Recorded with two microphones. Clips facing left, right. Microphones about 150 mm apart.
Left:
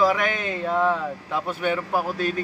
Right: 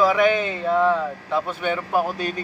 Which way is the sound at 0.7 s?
5° left (ahead or behind).